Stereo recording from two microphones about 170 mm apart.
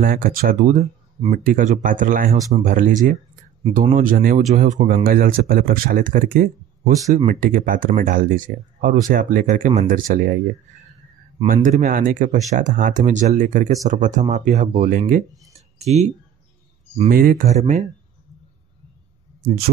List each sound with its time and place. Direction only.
0.0 s speech: 55° right (ahead or behind)
6.9 s speech: 20° right (ahead or behind)
7.2 s speech: 50° right (ahead or behind)
11.4 s speech: 50° right (ahead or behind)
15.8 s speech: 40° right (ahead or behind)
17.1 s speech: 55° right (ahead or behind)
17.5 s speech: 45° right (ahead or behind)